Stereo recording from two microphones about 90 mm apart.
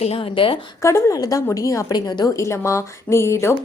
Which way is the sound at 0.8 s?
35° left (ahead or behind).